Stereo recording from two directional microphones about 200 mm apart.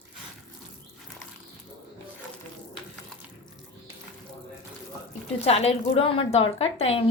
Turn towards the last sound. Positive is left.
turn(degrees=30)  # may be behind; listen again after turning